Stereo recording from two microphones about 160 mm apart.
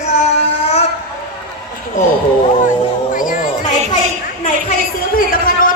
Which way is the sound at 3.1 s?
60° left (ahead or behind).